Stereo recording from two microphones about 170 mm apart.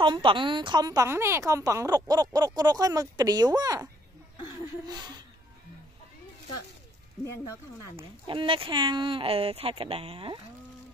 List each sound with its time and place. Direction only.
0.0 s speech: 30° right (ahead or behind)
8.3 s speech: 30° right (ahead or behind)